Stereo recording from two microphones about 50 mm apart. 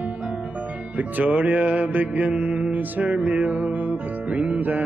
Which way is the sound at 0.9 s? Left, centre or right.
Right.